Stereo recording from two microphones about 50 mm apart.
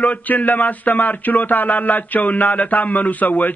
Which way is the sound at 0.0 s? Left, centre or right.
Left.